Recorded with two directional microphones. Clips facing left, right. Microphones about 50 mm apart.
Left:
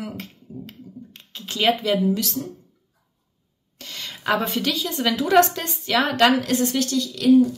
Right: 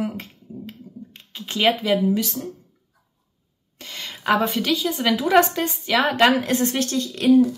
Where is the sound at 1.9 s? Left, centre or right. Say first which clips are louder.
Right 1 dB; right.